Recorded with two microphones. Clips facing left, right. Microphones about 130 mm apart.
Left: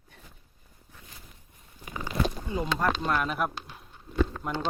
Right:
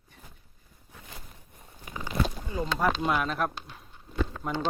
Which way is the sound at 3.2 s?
5° left (ahead or behind).